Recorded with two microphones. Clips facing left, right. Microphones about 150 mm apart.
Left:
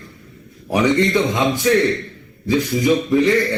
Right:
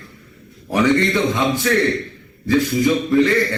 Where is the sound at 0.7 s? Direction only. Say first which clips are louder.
Even; 15° left (ahead or behind).